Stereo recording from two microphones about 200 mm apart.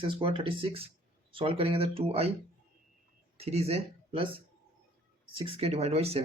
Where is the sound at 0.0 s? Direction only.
25° right (ahead or behind).